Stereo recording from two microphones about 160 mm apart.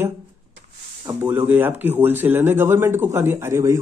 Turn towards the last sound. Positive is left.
turn(degrees=-15)  # may be behind; listen again after turning